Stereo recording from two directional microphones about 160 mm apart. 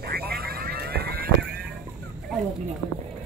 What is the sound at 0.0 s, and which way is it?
Vehicle, 75° right (ahead or behind).